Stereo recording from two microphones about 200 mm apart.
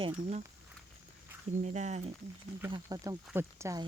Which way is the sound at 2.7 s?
20° right (ahead or behind).